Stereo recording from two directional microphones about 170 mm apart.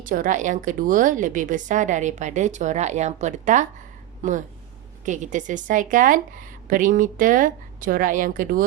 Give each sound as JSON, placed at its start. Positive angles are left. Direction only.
{"t": 0.0, "sound": "a woman's voice", "side_deg": -50}